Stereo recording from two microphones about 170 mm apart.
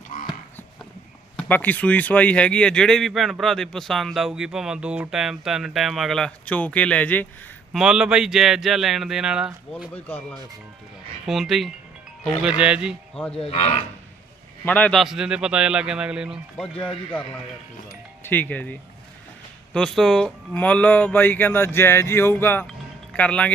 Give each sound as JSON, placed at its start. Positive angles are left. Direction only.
{"t": 1.4, "sound": "speech", "side_deg": 10}
{"t": 7.7, "sound": "speech", "side_deg": -5}
{"t": 9.9, "sound": "speech", "side_deg": 10}
{"t": 11.3, "sound": "speech", "side_deg": 0}
{"t": 13.3, "sound": "speech", "side_deg": 35}
{"t": 14.6, "sound": "speech", "side_deg": 10}
{"t": 18.2, "sound": "speech", "side_deg": 10}